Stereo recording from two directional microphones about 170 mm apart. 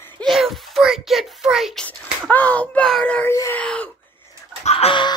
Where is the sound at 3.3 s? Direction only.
20° left (ahead or behind).